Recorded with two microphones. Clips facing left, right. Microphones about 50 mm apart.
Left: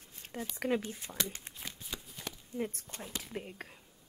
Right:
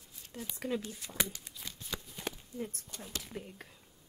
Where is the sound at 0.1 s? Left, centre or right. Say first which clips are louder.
Left 4 dB; left.